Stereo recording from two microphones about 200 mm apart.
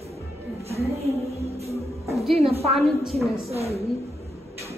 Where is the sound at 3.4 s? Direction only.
30° right (ahead or behind).